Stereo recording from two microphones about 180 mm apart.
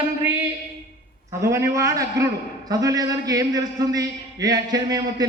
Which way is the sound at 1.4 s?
15° right (ahead or behind).